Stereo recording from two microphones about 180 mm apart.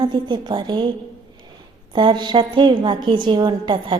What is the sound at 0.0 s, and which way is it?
Speech, 25° right (ahead or behind).